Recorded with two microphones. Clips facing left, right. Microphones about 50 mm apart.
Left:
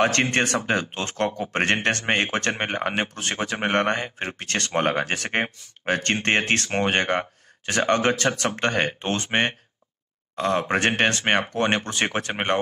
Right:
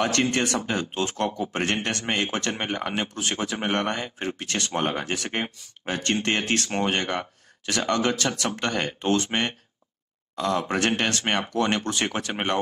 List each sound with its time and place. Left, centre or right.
0.0 s speech: left